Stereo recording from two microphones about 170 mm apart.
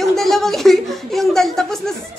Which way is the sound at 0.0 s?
Centre (ahead or behind).